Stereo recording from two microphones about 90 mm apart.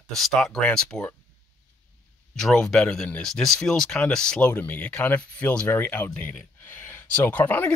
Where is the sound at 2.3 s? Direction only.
5° left (ahead or behind).